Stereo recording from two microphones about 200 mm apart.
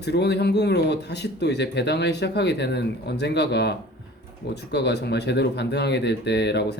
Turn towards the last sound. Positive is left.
turn(degrees=55)  # may be behind; listen again after turning